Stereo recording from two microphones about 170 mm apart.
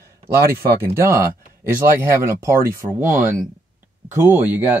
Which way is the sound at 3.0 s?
50° right (ahead or behind).